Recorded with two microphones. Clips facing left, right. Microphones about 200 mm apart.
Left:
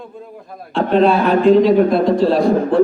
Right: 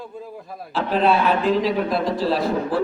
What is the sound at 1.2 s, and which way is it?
Speech, 40° left (ahead or behind).